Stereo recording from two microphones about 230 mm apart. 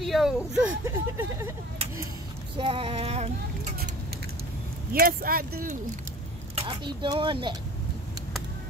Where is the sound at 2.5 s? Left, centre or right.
Right.